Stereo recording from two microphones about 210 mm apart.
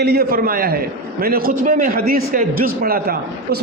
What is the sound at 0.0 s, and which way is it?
A man's voice, 50° right (ahead or behind).